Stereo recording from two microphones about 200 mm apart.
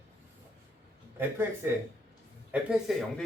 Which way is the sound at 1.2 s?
10° right (ahead or behind).